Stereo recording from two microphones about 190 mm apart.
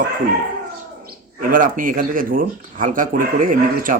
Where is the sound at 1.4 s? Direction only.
45° right (ahead or behind).